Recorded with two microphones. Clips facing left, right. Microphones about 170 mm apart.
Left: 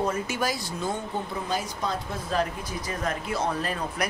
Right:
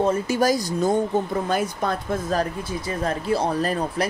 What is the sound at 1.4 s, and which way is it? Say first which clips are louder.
Speech: right 6 dB; 55° right (ahead or behind).